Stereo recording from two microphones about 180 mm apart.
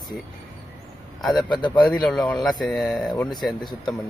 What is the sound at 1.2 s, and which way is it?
Speech, centre (ahead or behind).